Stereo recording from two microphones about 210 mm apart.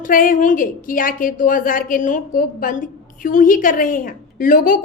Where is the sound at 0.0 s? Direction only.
40° left (ahead or behind).